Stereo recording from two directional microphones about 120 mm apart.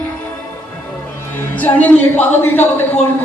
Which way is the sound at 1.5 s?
15° left (ahead or behind).